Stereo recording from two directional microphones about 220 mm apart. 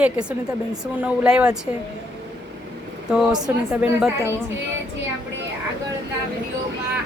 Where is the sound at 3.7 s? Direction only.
5° right (ahead or behind).